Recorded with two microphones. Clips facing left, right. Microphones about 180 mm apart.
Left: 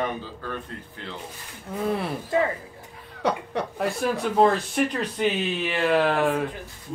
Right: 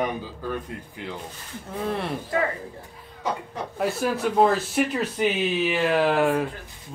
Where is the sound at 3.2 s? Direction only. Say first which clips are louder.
Left 4 dB; 70° left (ahead or behind).